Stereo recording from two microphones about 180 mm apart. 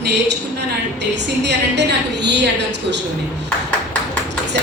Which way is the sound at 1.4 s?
70° right (ahead or behind).